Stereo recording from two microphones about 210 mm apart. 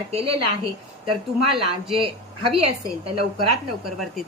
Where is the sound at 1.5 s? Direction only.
25° right (ahead or behind).